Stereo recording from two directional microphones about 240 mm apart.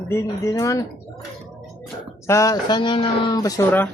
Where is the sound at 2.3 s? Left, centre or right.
Centre.